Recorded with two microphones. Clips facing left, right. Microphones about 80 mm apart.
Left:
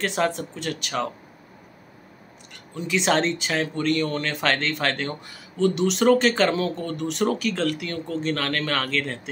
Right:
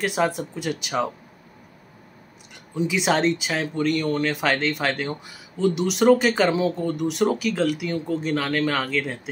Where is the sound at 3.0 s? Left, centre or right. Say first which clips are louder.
Even; centre.